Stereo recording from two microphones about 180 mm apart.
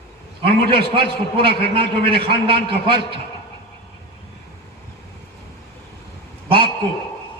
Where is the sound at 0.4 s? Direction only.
30° right (ahead or behind).